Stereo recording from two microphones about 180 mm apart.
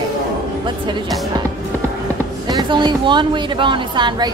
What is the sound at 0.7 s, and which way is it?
Speech, 25° right (ahead or behind).